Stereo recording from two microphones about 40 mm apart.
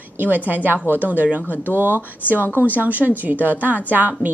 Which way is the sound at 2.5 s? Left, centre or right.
Left.